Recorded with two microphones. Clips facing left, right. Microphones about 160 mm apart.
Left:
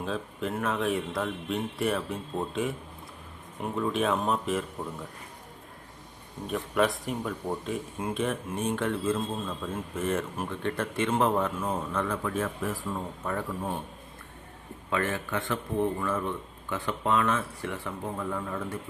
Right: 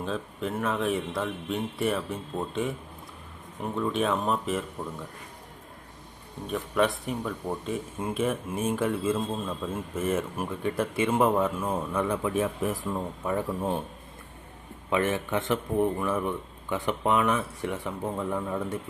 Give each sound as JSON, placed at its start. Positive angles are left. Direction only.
{"t": 0.0, "sound": "a man's voice", "side_deg": 0}
{"t": 6.5, "sound": "speech", "side_deg": 0}
{"t": 14.8, "sound": "speech", "side_deg": -20}